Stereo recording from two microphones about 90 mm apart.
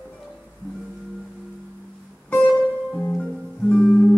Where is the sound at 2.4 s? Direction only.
15° left (ahead or behind).